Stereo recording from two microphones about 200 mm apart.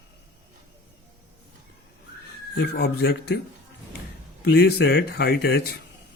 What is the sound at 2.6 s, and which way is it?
Speech, 55° left (ahead or behind).